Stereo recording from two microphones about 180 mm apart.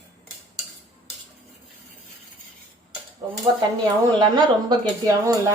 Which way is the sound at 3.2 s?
25° right (ahead or behind).